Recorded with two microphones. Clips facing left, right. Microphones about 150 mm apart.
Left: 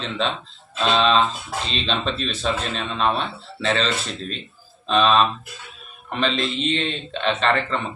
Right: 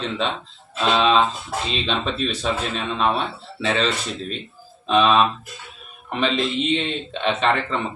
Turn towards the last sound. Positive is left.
turn(degrees=-15)  # may be behind; listen again after turning